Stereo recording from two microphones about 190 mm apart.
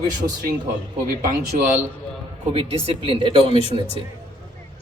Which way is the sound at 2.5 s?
30° right (ahead or behind).